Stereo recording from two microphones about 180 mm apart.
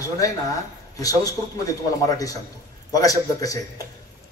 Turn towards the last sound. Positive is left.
turn(degrees=20)  # may be behind; listen again after turning